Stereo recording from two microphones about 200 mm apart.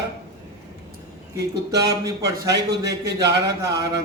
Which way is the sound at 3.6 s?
20° right (ahead or behind).